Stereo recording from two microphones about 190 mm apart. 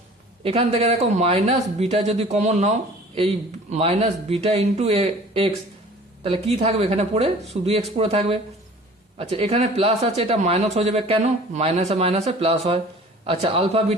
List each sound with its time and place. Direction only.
0.4 s speech: 30° right (ahead or behind)